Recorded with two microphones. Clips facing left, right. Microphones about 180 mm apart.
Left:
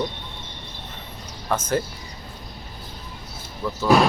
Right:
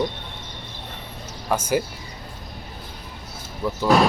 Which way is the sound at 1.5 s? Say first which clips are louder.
Right 1 dB; 10° right (ahead or behind).